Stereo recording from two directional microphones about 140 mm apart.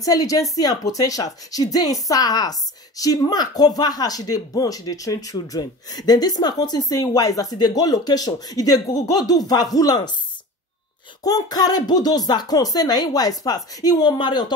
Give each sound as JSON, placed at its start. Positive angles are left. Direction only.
{"t": 0.0, "sound": "speech", "side_deg": 25}
{"t": 11.2, "sound": "speech", "side_deg": 25}